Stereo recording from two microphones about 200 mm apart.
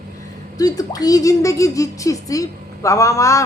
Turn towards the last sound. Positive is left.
turn(degrees=15)  # may be behind; listen again after turning